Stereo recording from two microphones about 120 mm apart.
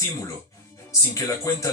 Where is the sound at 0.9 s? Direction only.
25° left (ahead or behind).